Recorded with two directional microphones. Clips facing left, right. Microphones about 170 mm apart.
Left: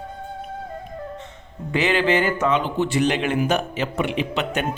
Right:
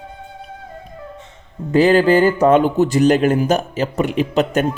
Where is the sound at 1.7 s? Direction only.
40° right (ahead or behind).